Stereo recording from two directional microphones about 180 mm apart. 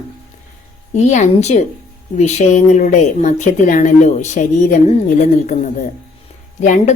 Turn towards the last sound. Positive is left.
turn(degrees=40)  # may be behind; listen again after turning